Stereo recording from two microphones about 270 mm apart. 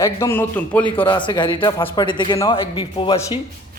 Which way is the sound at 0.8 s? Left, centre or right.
Centre.